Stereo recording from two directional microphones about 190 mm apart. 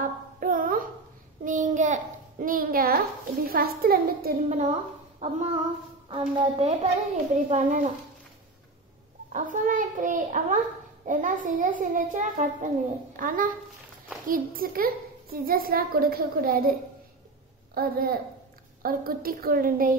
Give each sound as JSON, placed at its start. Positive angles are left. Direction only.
{"t": 0.0, "sound": "a sound", "side_deg": -45}
{"t": 3.4, "sound": "a child's voice", "side_deg": -50}
{"t": 5.2, "sound": "a woman's voice", "side_deg": -35}
{"t": 9.3, "sound": "a child's voice", "side_deg": -45}
{"t": 17.7, "sound": "a child's voice", "side_deg": -50}